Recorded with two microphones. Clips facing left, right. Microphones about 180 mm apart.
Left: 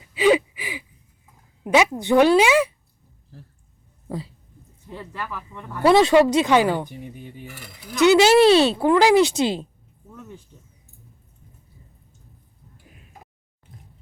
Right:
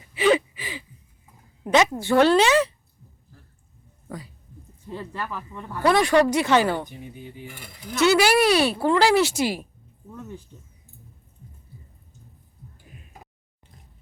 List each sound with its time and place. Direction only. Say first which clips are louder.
0.1 s gasp: left 2 dB; 10° left (ahead or behind)
1.6 s speech: left 1 dB; 10° left (ahead or behind)
4.1 s speech: left 6 dB; 25° left (ahead or behind)
4.9 s speech: right 1 dB; 25° right (ahead or behind)
5.8 s speech: left 4 dB; 25° left (ahead or behind)